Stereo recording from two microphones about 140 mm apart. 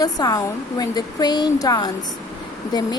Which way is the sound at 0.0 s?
25° left (ahead or behind).